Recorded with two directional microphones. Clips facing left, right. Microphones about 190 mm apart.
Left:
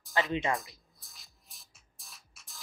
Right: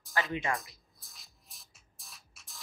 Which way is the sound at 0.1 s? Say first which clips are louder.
Left 3 dB; 20° left (ahead or behind).